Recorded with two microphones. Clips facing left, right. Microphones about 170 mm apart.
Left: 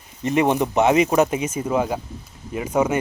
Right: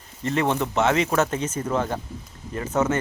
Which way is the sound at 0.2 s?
15° left (ahead or behind).